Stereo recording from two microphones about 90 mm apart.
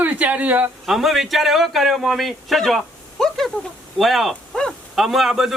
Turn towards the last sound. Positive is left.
turn(degrees=-5)  # may be behind; listen again after turning